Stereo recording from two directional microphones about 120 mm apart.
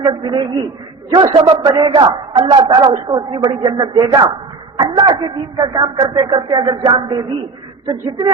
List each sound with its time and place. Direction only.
0.0 s a man's voice: 40° right (ahead or behind)